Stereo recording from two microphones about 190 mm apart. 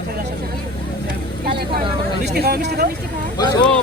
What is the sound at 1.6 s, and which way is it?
Speech, 55° right (ahead or behind).